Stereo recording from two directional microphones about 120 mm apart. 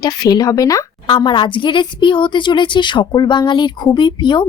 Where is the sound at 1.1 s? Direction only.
40° left (ahead or behind).